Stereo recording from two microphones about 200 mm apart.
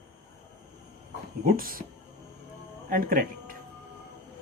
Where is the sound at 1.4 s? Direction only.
45° right (ahead or behind).